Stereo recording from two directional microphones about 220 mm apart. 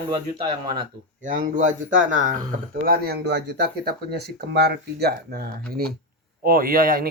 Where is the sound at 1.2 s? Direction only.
35° right (ahead or behind).